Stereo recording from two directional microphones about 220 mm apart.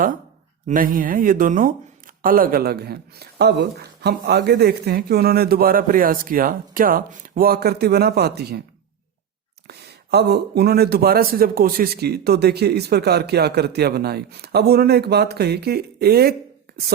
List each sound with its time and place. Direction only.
0.7 s speech: 40° right (ahead or behind)
9.6 s speech: 50° right (ahead or behind)